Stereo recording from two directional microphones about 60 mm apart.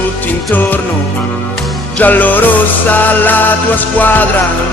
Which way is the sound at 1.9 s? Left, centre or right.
Left.